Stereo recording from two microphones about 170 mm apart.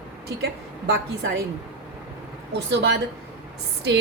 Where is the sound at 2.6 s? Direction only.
90° right.